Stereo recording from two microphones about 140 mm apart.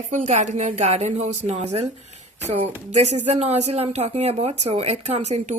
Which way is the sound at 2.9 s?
55° right (ahead or behind).